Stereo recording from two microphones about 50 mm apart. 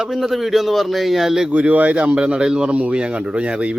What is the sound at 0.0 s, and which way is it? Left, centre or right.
A man's voice, centre.